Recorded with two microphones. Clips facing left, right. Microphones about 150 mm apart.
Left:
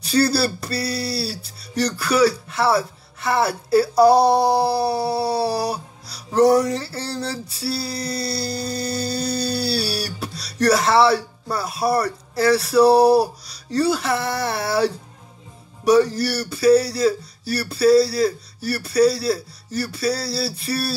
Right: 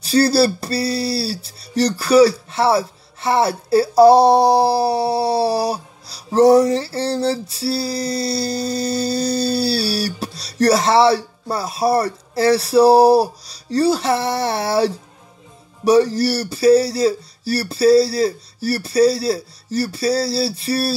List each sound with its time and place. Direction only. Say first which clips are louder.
0.0 s speech: right 4 dB; 35° right (ahead or behind)